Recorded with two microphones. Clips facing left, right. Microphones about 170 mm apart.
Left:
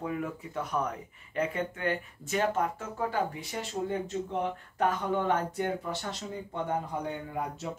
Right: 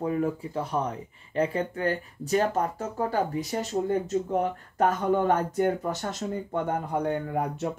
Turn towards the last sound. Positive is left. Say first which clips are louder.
# right 7 dB
turn(degrees=-60)  # may be behind; listen again after turning